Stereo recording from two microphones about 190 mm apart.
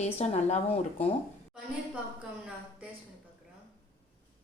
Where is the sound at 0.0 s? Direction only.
35° left (ahead or behind).